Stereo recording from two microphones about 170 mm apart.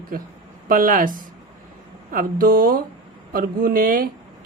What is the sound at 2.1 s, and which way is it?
A woman's voice, 55° right (ahead or behind).